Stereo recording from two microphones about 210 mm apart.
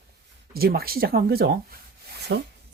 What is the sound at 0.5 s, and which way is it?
Speech, 45° right (ahead or behind).